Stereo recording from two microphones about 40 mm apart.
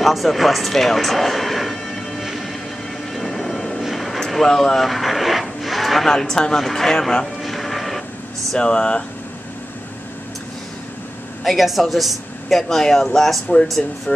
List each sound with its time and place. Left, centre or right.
0.0 s speech: centre
2.2 s music: centre
3.1 s vehicle: centre
4.3 s speech: centre
7.4 s music: centre
8.5 s speech: left
11.4 s speech: centre